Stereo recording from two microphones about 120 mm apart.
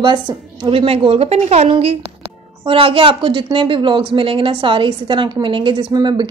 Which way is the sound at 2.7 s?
50° right (ahead or behind).